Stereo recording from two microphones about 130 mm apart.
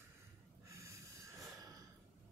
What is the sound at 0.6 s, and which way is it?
Snort, 25° right (ahead or behind).